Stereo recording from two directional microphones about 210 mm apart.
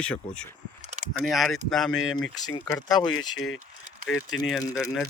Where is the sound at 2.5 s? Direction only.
20° left (ahead or behind).